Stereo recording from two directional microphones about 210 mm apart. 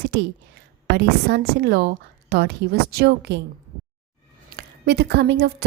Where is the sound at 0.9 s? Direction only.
50° right (ahead or behind).